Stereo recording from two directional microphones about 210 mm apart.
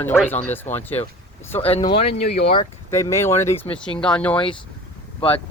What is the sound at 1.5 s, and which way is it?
Speech, 30° left (ahead or behind).